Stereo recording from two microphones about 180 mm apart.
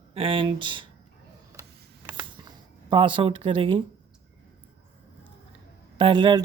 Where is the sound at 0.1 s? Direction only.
30° right (ahead or behind).